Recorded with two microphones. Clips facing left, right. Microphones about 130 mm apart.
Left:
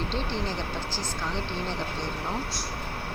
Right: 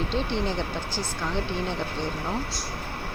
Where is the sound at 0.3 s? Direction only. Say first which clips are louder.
Right 3 dB; 15° right (ahead or behind).